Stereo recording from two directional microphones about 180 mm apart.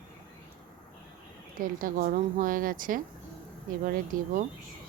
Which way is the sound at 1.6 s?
50° right (ahead or behind).